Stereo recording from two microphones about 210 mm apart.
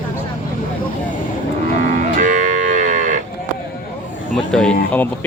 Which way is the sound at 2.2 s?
35° right (ahead or behind).